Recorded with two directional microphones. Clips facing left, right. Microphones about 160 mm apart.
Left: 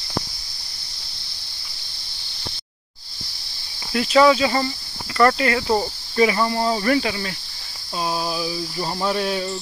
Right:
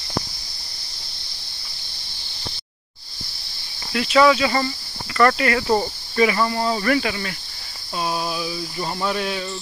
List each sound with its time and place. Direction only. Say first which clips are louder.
3.9 s speech: left 1 dB; 35° left (ahead or behind)
8.3 s a sound: left 1 dB; 35° left (ahead or behind)
8.7 s snake: left 1 dB; 10° left (ahead or behind)
9.0 s speech: left 3 dB; 35° left (ahead or behind)